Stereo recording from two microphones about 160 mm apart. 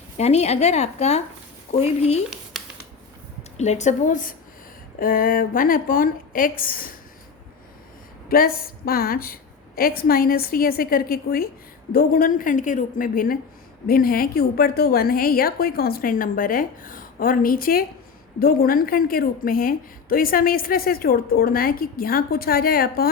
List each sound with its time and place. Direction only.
0.2 s a woman's voice: 40° left (ahead or behind)
3.6 s a woman's voice: 45° left (ahead or behind)
8.3 s a woman's voice: 65° left (ahead or behind)